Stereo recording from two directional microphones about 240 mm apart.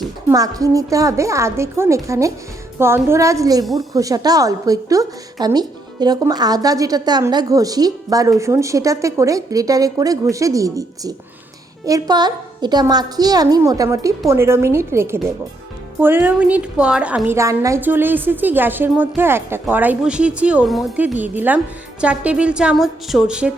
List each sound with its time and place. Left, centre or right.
0.3 s a woman's voice: centre